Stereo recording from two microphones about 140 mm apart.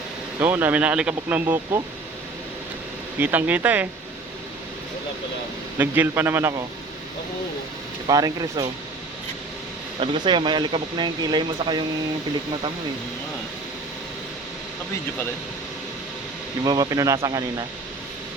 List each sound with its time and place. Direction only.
0.3 s speech: 15° right (ahead or behind)
3.2 s speech: 10° right (ahead or behind)
5.7 s speech: 15° right (ahead or behind)
8.0 s speech: 25° right (ahead or behind)
10.0 s speech: 35° right (ahead or behind)
16.6 s speech: 25° right (ahead or behind)